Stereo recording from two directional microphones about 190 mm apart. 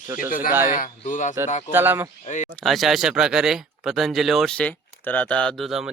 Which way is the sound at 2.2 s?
40° left (ahead or behind).